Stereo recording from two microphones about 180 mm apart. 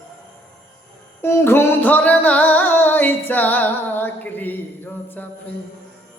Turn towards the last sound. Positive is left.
turn(degrees=10)  # may be behind; listen again after turning